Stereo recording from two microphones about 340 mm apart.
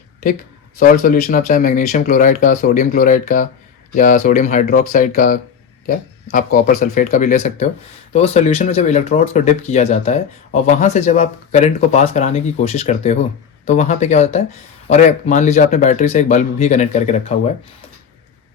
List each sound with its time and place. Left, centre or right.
0.8 s speech: left